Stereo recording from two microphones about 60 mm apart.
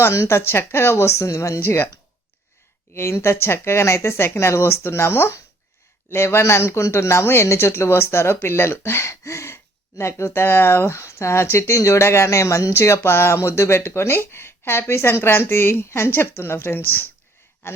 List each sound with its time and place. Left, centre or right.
0.1 s speech: left
2.9 s speech: left